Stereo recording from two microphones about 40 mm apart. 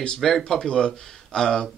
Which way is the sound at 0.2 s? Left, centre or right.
Centre.